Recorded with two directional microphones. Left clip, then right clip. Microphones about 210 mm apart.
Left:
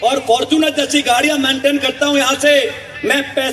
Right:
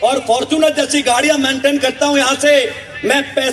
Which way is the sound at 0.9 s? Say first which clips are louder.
Right 1 dB; 20° right (ahead or behind).